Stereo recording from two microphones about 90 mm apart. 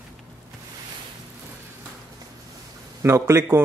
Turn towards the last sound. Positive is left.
turn(degrees=-30)  # may be behind; listen again after turning